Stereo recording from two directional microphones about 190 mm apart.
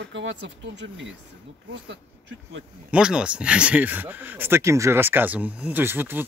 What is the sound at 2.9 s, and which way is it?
Speech, 5° right (ahead or behind).